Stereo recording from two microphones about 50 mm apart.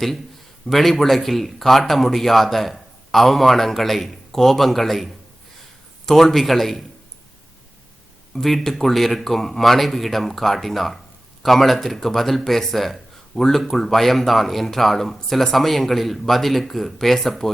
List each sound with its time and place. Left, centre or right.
0.7 s speech: centre
8.4 s speech: centre